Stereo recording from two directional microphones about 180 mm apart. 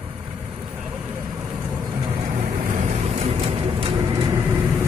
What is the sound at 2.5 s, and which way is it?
Vehicle, 45° right (ahead or behind).